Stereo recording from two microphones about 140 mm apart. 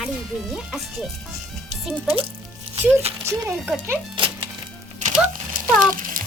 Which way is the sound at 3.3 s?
20° right (ahead or behind).